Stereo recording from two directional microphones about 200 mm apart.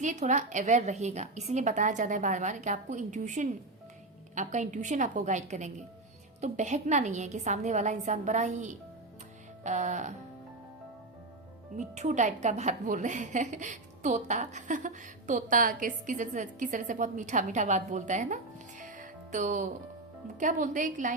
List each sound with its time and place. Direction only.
0.0 s a woman's voice: 40° right (ahead or behind)
11.8 s a woman's voice: 35° right (ahead or behind)
18.8 s music: 40° right (ahead or behind)
20.4 s a woman's voice: 40° right (ahead or behind)